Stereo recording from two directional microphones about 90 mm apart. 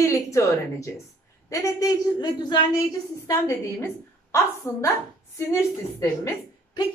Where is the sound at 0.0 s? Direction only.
35° left (ahead or behind).